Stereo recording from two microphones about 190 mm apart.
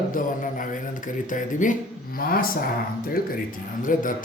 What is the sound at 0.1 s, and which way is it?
Speech, 45° left (ahead or behind).